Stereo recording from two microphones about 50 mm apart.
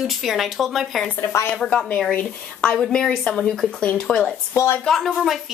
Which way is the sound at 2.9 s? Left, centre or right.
Centre.